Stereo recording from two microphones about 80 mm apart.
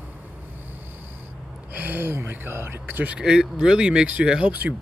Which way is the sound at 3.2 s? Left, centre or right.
Centre.